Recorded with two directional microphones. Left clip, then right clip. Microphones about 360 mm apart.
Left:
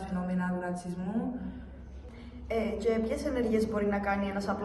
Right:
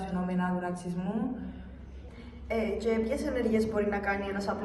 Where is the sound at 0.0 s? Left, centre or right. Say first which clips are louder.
Right 2 dB; centre.